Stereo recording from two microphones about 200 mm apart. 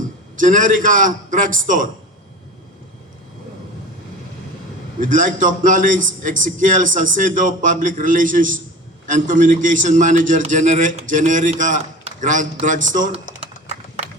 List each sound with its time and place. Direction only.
0.3 s a man's voice: 40° right (ahead or behind)
4.9 s a man's voice: 40° right (ahead or behind)